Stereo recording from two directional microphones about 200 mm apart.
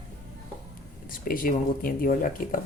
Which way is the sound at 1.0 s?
45° left (ahead or behind).